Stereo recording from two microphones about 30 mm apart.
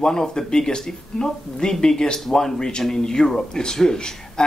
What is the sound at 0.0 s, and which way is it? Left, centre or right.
Speech, left.